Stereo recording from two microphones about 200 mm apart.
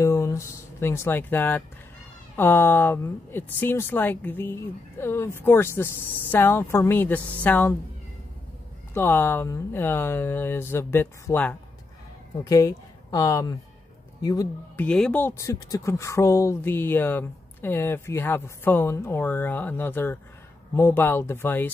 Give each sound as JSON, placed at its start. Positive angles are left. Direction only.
{"t": 0.0, "sound": "a sound", "side_deg": 15}
{"t": 2.3, "sound": "speech", "side_deg": 10}
{"t": 8.9, "sound": "speech", "side_deg": 10}
{"t": 14.9, "sound": "speech", "side_deg": 5}